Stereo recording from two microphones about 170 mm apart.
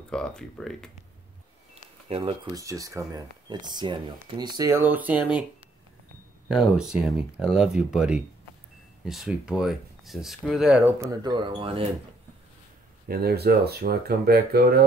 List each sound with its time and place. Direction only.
0.1 s speech: 5° left (ahead or behind)
2.0 s speech: 35° right (ahead or behind)
2.5 s speech: 20° right (ahead or behind)
6.5 s speech: centre (ahead or behind)
11.1 s speech: 25° right (ahead or behind)
13.1 s speech: 65° right (ahead or behind)